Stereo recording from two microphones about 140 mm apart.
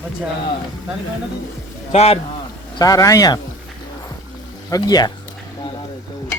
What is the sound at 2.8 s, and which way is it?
Speech, 25° left (ahead or behind).